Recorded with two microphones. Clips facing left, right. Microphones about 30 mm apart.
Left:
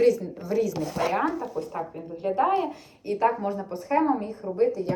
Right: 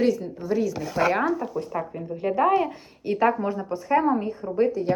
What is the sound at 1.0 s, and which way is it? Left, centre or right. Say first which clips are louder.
Speech: right 4 dB; right.